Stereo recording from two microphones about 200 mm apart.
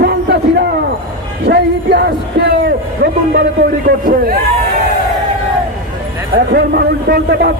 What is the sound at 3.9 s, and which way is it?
Speech, 45° right (ahead or behind).